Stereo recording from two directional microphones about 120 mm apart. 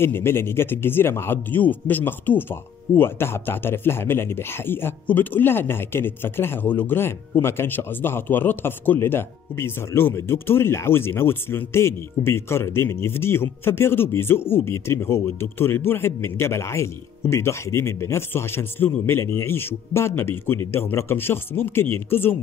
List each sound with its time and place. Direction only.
0.0 s speech: 20° left (ahead or behind)